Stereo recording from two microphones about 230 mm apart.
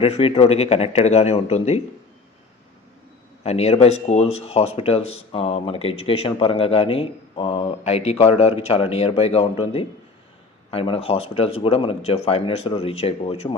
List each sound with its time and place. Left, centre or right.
0.0 s speech: left
3.4 s speech: left